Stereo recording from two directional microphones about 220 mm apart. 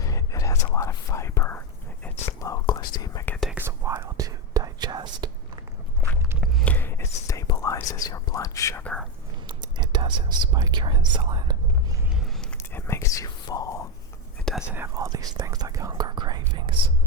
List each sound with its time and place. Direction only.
0.0 s whispering: 15° left (ahead or behind)
3.4 s whispering: 10° right (ahead or behind)
6.4 s whispering: 5° left (ahead or behind)
9.5 s whispering: 20° right (ahead or behind)
12.1 s whispering: centre (ahead or behind)
14.7 s whispering: 10° right (ahead or behind)